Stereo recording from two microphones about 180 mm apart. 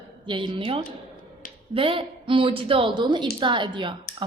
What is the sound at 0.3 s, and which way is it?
A woman's voice, 30° right (ahead or behind).